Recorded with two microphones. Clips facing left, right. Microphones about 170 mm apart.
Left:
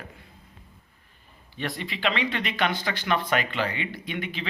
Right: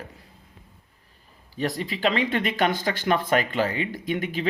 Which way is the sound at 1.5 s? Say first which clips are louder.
Right 5 dB; 40° right (ahead or behind).